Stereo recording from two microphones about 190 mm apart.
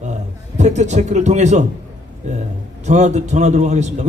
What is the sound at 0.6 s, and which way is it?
A man's voice, 35° right (ahead or behind).